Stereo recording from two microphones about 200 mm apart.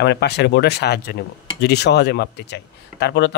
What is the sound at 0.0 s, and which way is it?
Speech, 55° left (ahead or behind).